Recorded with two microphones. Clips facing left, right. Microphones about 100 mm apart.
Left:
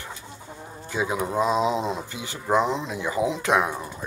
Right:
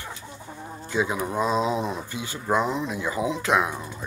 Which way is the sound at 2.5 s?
25° left (ahead or behind).